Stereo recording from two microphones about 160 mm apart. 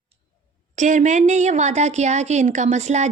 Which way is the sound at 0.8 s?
50° right (ahead or behind).